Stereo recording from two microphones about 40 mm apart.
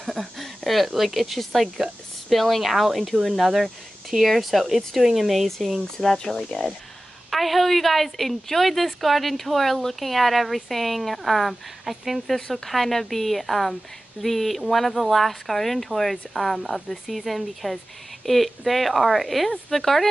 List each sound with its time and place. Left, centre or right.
0.1 s a woman's voice: centre
5.9 s speech: centre
7.2 s a woman's voice: centre
12.4 s speech: centre
12.6 s a woman's voice: centre